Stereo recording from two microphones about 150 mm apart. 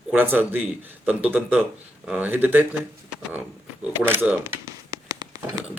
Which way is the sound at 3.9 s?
15° right (ahead or behind).